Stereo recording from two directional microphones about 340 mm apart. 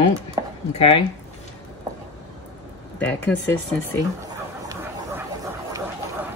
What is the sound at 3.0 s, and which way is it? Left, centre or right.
Speech, centre.